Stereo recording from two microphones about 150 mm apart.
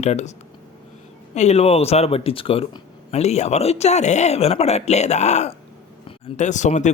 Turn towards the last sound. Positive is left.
turn(degrees=50)  # may be behind; listen again after turning